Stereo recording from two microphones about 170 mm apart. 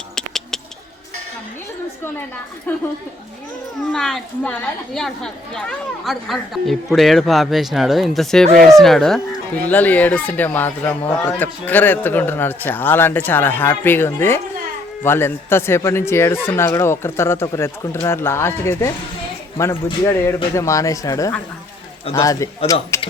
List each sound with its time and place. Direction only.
0.2 s a sound: 5° left (ahead or behind)
2.7 s speech: 10° left (ahead or behind)
3.9 s a woman's voice: 5° left (ahead or behind)